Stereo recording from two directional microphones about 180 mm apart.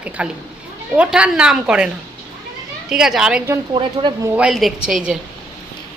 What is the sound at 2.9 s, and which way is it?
Speech, 5° right (ahead or behind).